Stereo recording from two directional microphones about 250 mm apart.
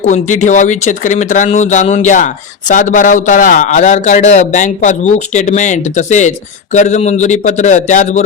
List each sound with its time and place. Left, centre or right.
0.0 s speech: left